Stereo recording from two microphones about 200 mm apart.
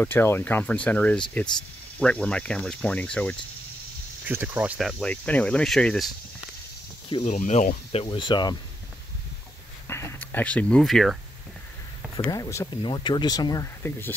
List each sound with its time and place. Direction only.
0.0 s speech: 10° left (ahead or behind)
4.3 s speech: 10° right (ahead or behind)
7.1 s speech: 30° left (ahead or behind)
9.8 s a sound: 15° left (ahead or behind)
12.2 s speech: 20° left (ahead or behind)